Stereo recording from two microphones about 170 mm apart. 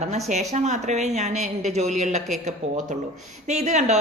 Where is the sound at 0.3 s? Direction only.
40° right (ahead or behind).